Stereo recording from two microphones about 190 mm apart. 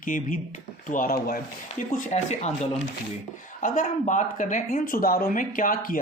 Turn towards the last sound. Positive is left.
turn(degrees=45)  # may be behind; listen again after turning